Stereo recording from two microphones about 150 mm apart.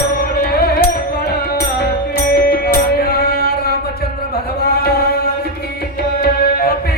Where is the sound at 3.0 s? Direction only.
90° left.